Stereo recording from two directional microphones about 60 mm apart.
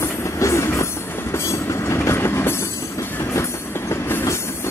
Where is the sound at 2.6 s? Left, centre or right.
Left.